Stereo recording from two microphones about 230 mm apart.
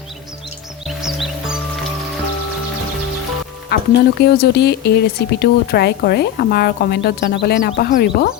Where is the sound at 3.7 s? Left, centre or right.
Left.